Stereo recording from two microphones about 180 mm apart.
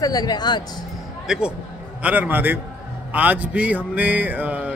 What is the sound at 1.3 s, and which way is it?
Speech, 5° right (ahead or behind).